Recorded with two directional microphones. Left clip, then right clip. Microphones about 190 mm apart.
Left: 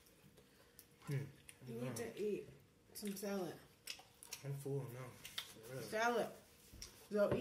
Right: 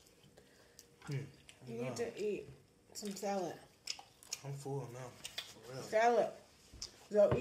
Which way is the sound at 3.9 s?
20° left (ahead or behind).